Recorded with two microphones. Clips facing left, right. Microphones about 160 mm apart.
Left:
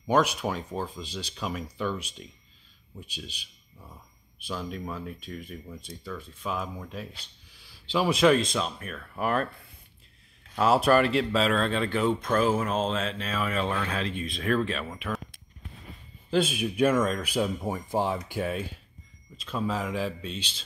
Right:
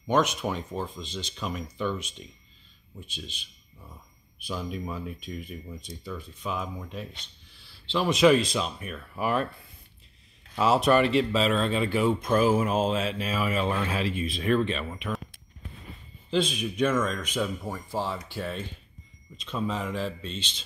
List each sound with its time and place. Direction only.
0.0 s speech: 5° left (ahead or behind)
4.5 s speech: 5° right (ahead or behind)
10.5 s speech: centre (ahead or behind)
16.3 s speech: 5° left (ahead or behind)